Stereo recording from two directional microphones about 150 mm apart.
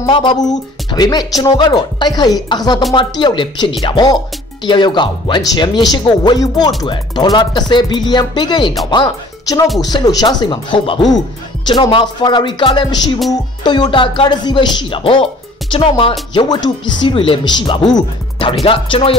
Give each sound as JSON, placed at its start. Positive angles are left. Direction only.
{"t": 0.1, "sound": "speech", "side_deg": 35}